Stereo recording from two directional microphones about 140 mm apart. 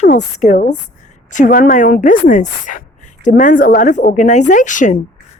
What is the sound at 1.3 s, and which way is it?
A woman's voice, 70° left (ahead or behind).